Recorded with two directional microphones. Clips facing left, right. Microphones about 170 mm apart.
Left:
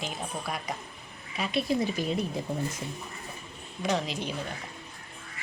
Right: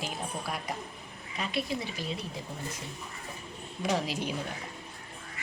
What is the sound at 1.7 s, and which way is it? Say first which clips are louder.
Speech: left 7 dB; 50° left (ahead or behind).